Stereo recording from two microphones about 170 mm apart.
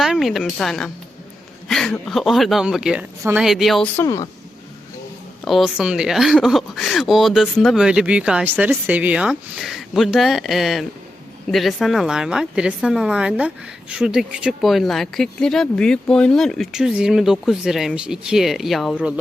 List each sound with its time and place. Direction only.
0.0 s speech: centre (ahead or behind)
3.9 s a woman's voice: 20° left (ahead or behind)
5.5 s speech: centre (ahead or behind)